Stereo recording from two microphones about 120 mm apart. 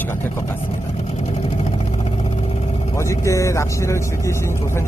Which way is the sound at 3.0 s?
25° left (ahead or behind).